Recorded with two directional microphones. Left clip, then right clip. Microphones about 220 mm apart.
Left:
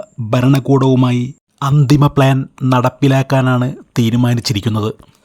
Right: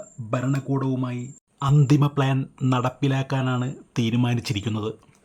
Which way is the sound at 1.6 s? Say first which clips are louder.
Left 8 dB; 20° left (ahead or behind).